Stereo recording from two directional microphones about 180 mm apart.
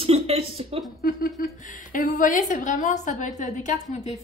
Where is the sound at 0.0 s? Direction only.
30° right (ahead or behind).